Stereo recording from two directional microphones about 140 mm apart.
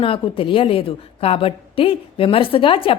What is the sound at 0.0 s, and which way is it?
A woman's voice, 40° left (ahead or behind).